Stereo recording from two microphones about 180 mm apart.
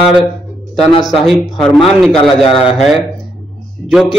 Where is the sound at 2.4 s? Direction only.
30° left (ahead or behind).